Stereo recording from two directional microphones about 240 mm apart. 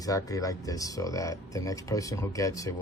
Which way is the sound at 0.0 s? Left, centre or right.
Centre.